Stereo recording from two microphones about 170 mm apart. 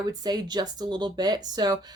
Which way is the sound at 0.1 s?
25° right (ahead or behind).